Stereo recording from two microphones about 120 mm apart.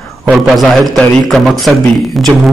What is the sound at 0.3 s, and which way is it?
A man's voice, 5° right (ahead or behind).